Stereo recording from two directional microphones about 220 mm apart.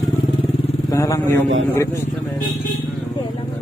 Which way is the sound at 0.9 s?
15° left (ahead or behind).